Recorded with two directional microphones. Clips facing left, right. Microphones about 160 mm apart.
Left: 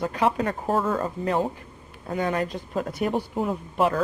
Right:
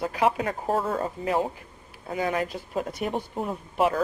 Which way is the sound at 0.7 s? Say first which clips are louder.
Left 2 dB; 35° right (ahead or behind).